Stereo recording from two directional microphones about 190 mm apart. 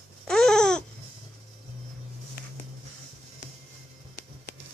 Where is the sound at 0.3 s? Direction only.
5° left (ahead or behind).